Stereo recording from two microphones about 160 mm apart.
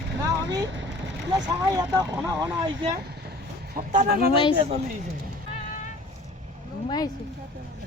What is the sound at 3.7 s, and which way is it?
Speech, 60° right (ahead or behind).